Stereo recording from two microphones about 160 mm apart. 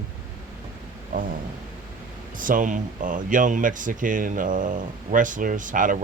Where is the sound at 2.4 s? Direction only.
55° right (ahead or behind).